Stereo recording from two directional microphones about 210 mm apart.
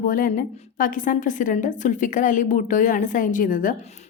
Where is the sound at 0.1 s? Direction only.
40° left (ahead or behind).